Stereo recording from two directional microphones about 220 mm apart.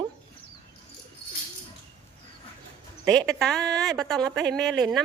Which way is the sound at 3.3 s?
5° left (ahead or behind).